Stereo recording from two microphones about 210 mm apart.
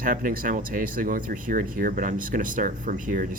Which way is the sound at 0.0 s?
40° right (ahead or behind).